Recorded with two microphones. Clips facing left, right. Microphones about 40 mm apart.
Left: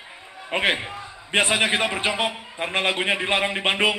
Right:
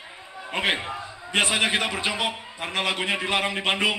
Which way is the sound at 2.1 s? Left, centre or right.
Left.